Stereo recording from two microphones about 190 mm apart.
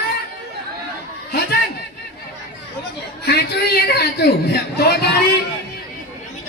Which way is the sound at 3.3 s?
60° left (ahead or behind).